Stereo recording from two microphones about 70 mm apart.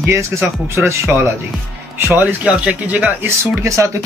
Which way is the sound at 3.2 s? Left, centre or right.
Right.